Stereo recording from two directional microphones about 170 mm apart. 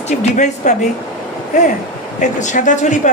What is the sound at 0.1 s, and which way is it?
Speech, 45° left (ahead or behind).